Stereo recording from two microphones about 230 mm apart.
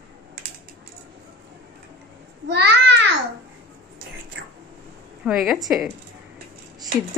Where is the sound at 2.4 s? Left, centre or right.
Right.